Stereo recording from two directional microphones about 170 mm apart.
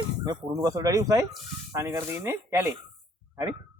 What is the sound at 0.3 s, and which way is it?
Speech, 20° right (ahead or behind).